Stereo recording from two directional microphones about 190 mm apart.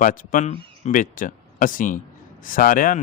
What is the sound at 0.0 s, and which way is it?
A man's voice, 45° left (ahead or behind).